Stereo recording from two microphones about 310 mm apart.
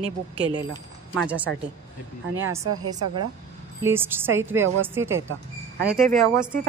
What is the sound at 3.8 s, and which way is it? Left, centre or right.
A woman's voice, centre.